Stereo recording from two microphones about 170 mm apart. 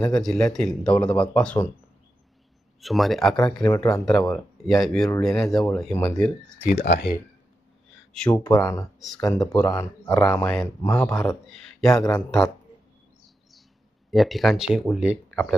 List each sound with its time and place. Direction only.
0.0 s speech: 5° left (ahead or behind)
2.8 s speech: centre (ahead or behind)
6.7 s speech: 85° left
8.1 s speech: 5° left (ahead or behind)
8.4 s speech: 20° left (ahead or behind)
11.4 s speech: centre (ahead or behind)
14.1 s speech: centre (ahead or behind)